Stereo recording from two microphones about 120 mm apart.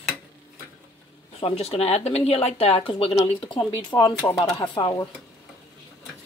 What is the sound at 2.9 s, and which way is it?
Speech, 45° left (ahead or behind).